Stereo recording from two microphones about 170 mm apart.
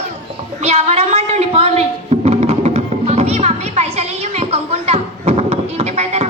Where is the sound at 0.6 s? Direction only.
40° right (ahead or behind).